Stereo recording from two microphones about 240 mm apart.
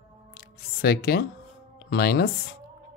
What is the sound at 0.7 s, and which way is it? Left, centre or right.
A woman's voice, left.